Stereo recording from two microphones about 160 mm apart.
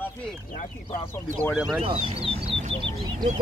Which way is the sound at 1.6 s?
Centre (ahead or behind).